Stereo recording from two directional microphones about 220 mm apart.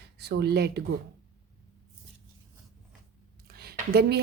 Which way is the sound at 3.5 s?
45° right (ahead or behind).